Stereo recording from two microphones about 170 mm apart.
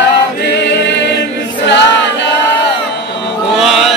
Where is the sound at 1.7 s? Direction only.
90° left.